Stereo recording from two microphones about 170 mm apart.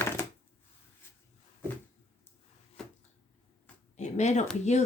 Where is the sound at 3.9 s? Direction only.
45° left (ahead or behind).